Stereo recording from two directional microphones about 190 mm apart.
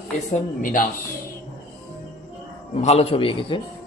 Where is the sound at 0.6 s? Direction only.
45° left (ahead or behind).